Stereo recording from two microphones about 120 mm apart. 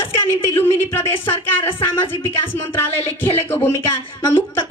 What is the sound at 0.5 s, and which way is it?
Speech, 20° left (ahead or behind).